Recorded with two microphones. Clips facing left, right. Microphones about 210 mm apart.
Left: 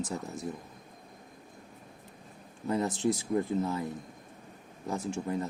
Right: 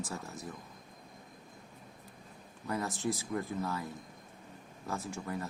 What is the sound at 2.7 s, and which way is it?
Speech, 25° left (ahead or behind).